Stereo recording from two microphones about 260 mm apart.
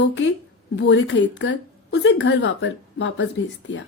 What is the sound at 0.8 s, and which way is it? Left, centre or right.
Speech, left.